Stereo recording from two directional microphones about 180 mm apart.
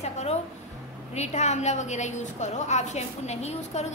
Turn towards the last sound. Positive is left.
turn(degrees=40)  # may be behind; listen again after turning